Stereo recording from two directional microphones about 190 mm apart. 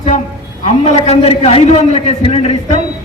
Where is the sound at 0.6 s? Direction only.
35° left (ahead or behind).